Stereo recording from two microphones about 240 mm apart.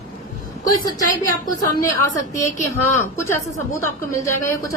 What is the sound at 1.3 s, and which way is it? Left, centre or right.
A woman's voice, centre.